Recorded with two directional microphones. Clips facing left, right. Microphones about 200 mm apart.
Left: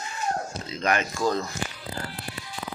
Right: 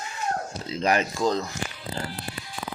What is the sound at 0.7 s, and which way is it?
Speech, 30° right (ahead or behind).